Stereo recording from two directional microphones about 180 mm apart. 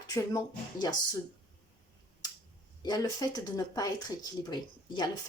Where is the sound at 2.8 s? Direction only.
20° left (ahead or behind).